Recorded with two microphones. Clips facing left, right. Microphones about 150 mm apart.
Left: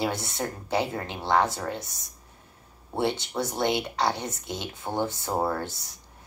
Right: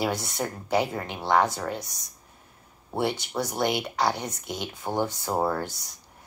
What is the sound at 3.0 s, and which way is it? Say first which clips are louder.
Speech: even; 25° left (ahead or behind).